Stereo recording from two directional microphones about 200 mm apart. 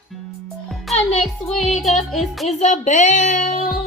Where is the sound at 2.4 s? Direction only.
35° left (ahead or behind).